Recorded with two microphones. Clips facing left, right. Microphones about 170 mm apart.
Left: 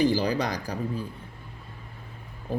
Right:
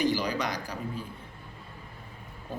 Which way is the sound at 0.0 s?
35° left (ahead or behind).